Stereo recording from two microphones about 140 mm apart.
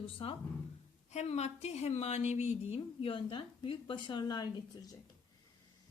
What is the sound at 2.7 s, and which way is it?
A woman's voice, 35° left (ahead or behind).